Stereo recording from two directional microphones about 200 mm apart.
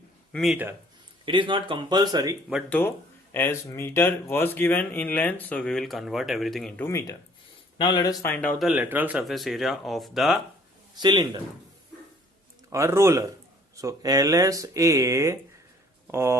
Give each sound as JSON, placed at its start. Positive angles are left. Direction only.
{"t": 0.3, "sound": "speech", "side_deg": -5}
{"t": 1.2, "sound": "speech", "side_deg": -25}
{"t": 2.5, "sound": "speech", "side_deg": 0}
{"t": 7.8, "sound": "speech", "side_deg": 20}
{"t": 10.9, "sound": "speech", "side_deg": -20}
{"t": 12.7, "sound": "speech", "side_deg": -15}